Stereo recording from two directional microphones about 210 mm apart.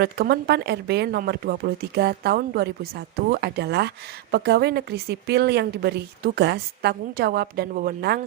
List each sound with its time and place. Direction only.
0.0 s speech: 50° right (ahead or behind)